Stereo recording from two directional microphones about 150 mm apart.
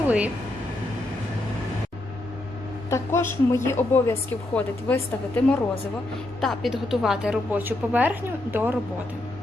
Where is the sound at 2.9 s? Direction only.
20° left (ahead or behind).